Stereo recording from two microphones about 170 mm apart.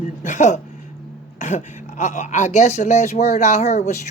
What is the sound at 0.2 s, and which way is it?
Speech, 50° left (ahead or behind).